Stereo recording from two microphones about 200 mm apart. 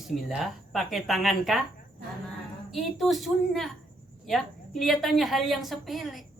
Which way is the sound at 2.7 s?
Centre (ahead or behind).